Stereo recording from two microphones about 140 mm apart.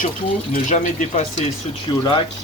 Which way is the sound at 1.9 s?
35° left (ahead or behind).